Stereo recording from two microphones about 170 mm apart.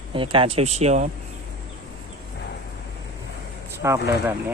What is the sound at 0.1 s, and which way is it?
Speech, 30° right (ahead or behind).